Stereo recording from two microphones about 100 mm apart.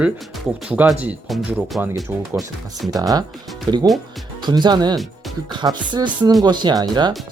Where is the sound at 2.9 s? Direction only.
35° right (ahead or behind).